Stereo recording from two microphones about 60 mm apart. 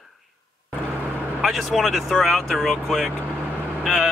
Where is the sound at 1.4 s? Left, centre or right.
Centre.